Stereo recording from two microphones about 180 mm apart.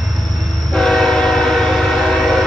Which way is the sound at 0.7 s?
Centre (ahead or behind).